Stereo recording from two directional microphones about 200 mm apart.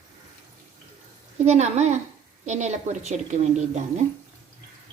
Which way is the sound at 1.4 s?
35° right (ahead or behind).